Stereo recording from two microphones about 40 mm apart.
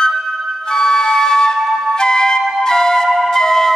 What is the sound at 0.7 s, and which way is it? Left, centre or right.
Music, centre.